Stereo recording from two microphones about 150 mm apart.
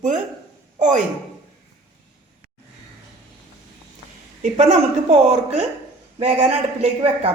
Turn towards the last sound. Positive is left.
turn(degrees=-45)  # may be behind; listen again after turning